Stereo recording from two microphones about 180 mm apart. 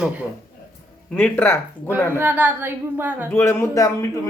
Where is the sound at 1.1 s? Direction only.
10° left (ahead or behind).